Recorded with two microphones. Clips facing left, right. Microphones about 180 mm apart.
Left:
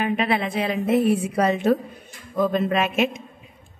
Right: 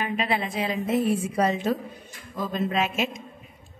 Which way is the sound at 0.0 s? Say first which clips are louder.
Left 4 dB; 60° left (ahead or behind).